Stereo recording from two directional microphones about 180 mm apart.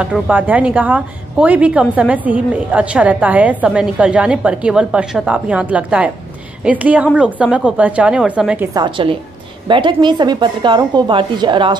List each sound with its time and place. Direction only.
0.0 s a woman's voice: 5° right (ahead or behind)
8.7 s a woman's voice: 25° right (ahead or behind)